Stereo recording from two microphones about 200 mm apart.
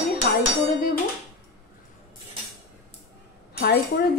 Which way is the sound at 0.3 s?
50° left (ahead or behind).